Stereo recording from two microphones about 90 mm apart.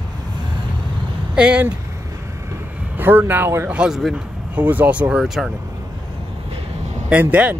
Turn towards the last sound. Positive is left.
turn(degrees=-15)  # may be behind; listen again after turning